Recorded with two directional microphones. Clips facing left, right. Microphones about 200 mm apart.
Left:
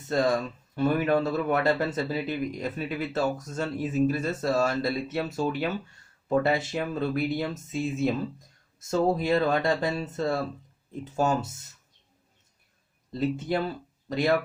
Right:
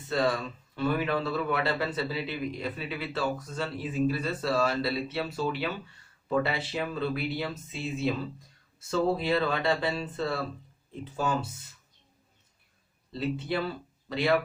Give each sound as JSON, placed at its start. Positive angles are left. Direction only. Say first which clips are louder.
{"t": 0.1, "sound": "a man's voice", "louder": "left 3 dB", "side_deg": 45}
{"t": 13.1, "sound": "a man's voice", "louder": "left 3 dB", "side_deg": 45}